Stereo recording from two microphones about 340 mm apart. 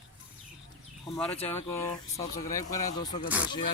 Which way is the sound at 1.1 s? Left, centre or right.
Centre.